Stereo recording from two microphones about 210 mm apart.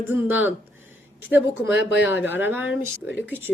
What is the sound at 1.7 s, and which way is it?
Speech, 60° left (ahead or behind).